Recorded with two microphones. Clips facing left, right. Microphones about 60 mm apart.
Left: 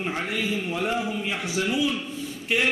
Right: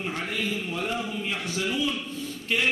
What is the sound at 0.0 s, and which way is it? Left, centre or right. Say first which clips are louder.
A man's voice: left 2 dB; centre.